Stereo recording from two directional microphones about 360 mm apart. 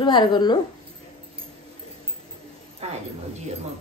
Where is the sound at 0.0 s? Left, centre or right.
Centre.